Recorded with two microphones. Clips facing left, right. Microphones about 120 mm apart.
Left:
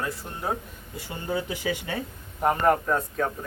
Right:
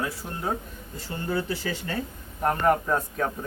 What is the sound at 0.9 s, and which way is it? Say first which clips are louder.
Speech: right 1 dB; 15° left (ahead or behind).